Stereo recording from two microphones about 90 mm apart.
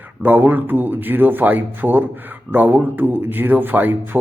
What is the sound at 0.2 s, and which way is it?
Speech, 20° right (ahead or behind).